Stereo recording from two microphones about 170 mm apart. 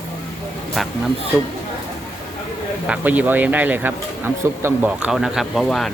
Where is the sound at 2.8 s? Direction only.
10° right (ahead or behind).